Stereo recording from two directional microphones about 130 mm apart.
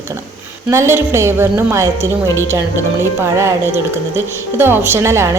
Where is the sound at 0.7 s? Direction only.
20° right (ahead or behind).